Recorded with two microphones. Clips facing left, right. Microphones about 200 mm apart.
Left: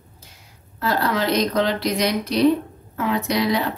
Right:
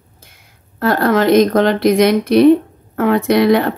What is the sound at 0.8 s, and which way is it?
Speech, 50° right (ahead or behind).